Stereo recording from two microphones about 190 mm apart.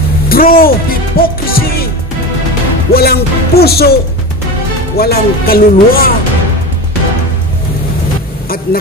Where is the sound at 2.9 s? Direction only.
55° left (ahead or behind).